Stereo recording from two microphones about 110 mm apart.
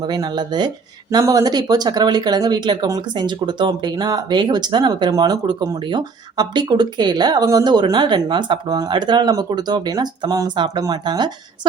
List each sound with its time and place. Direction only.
0.0 s speech: 40° right (ahead or behind)